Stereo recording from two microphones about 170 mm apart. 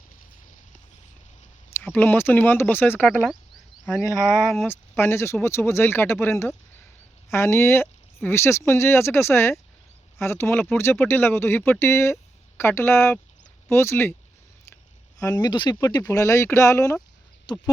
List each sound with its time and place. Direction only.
1.7 s speech: 10° left (ahead or behind)
15.2 s speech: 20° left (ahead or behind)
17.5 s speech: 25° left (ahead or behind)